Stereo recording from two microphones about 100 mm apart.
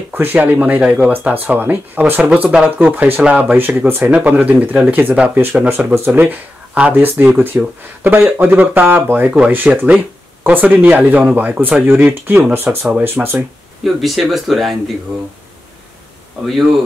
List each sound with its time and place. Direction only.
0.1 s speech: 20° right (ahead or behind)
12.6 s speech: 5° right (ahead or behind)
13.0 s speech: 20° right (ahead or behind)
13.8 s speech: centre (ahead or behind)
16.4 s speech: centre (ahead or behind)